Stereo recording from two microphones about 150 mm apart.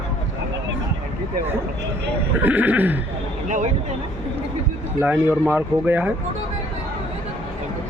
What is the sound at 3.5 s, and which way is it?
Speech, 60° right (ahead or behind).